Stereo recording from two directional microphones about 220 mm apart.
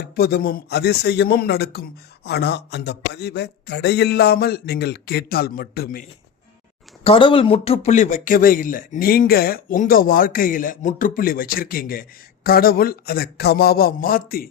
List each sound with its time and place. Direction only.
0.2 s speech: 45° left (ahead or behind)
7.0 s speech: 25° left (ahead or behind); by 14.4 s 40° left (ahead or behind)